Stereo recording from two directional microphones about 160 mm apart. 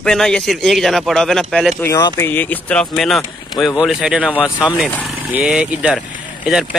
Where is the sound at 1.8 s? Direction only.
20° left (ahead or behind); by 4.3 s 5° right (ahead or behind).